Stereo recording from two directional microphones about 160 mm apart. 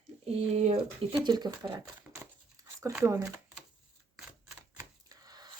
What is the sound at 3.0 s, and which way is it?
Speech, 20° right (ahead or behind).